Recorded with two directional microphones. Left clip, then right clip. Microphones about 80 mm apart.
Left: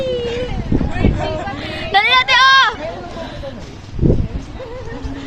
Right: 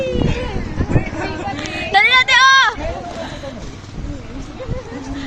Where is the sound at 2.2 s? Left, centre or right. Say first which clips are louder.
Even; centre.